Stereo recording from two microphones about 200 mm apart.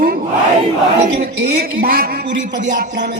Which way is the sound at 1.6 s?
45° right (ahead or behind).